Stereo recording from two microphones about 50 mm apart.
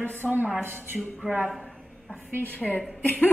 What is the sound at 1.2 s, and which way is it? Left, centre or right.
Speech, left.